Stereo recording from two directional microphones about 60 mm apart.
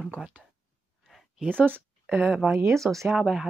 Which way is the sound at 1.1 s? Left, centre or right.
Centre.